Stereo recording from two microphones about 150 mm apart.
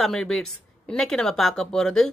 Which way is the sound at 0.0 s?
Centre (ahead or behind).